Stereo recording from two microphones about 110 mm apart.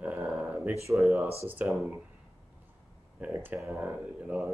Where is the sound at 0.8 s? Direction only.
25° right (ahead or behind).